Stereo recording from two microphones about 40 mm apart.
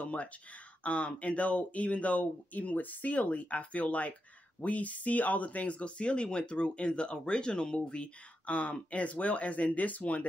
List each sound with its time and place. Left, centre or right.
0.0 s speech: left